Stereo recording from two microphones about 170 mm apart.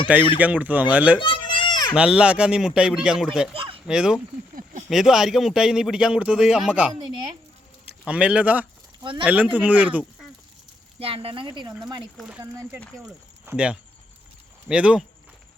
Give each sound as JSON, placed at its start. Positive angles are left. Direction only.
{"t": 0.3, "sound": "speech", "side_deg": -10}
{"t": 1.2, "sound": "a sound", "side_deg": 30}
{"t": 2.0, "sound": "speech", "side_deg": -5}
{"t": 3.5, "sound": "a sound", "side_deg": -35}
{"t": 3.8, "sound": "speech", "side_deg": -5}
{"t": 8.0, "sound": "speech", "side_deg": -5}
{"t": 11.0, "sound": "speech", "side_deg": -35}
{"t": 12.4, "sound": "speech", "side_deg": -15}